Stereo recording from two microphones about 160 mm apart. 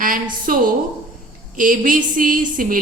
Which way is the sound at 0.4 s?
60° right (ahead or behind).